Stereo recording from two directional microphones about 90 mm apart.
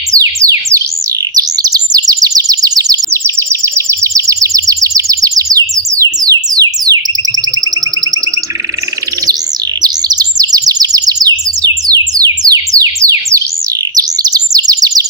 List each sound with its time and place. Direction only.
0.1 s music: 40° right (ahead or behind)
1.4 s chirp: 45° right (ahead or behind)
3.1 s a sound: 30° right (ahead or behind); by 7.0 s 45° right (ahead or behind)
9.8 s chirp: 45° right (ahead or behind)